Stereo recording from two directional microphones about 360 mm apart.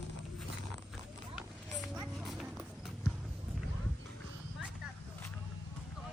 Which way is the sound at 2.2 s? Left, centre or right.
Centre.